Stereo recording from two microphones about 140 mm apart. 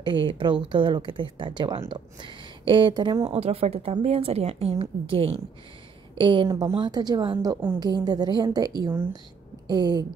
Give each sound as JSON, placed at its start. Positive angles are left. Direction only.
{"t": 0.0, "sound": "speech", "side_deg": -35}
{"t": 3.3, "sound": "a woman's voice", "side_deg": -50}